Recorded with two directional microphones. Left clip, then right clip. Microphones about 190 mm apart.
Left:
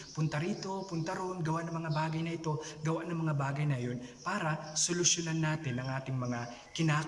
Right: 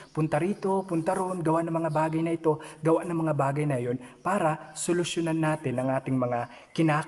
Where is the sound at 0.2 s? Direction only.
25° right (ahead or behind).